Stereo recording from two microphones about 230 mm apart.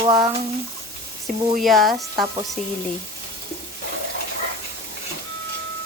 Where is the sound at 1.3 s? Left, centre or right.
Right.